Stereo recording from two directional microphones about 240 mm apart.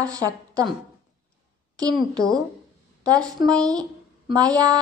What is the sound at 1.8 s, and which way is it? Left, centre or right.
A woman's voice, centre.